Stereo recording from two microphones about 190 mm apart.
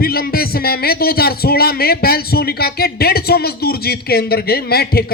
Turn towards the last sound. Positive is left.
turn(degrees=55)  # may be behind; listen again after turning